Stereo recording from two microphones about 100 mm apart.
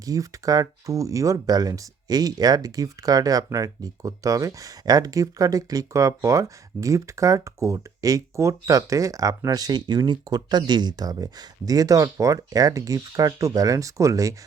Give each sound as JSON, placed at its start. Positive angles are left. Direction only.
{"t": 0.0, "sound": "speech", "side_deg": -35}